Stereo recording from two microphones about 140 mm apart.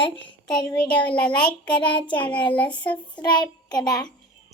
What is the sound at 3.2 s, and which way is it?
Speech, 30° left (ahead or behind).